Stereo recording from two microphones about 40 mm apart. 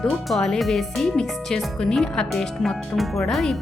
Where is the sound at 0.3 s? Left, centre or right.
Centre.